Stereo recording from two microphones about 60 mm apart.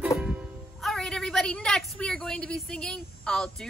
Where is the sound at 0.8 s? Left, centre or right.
Centre.